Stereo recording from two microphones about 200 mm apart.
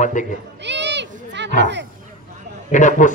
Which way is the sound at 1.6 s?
60° right (ahead or behind).